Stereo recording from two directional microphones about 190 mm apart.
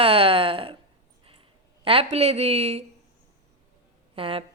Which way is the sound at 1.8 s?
30° right (ahead or behind).